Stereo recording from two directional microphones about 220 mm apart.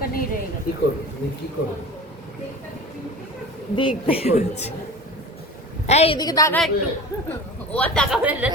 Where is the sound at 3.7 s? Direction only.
25° left (ahead or behind).